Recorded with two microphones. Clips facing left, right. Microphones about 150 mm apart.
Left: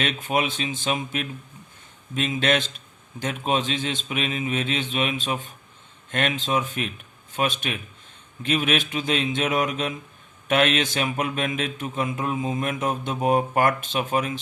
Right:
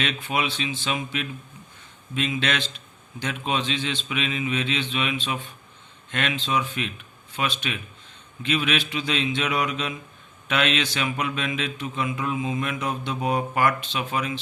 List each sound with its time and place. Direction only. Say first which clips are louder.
0.0 s speech: left 2 dB; 45° left (ahead or behind)